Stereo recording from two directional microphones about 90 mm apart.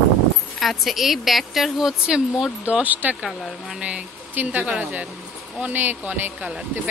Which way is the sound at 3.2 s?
5° right (ahead or behind).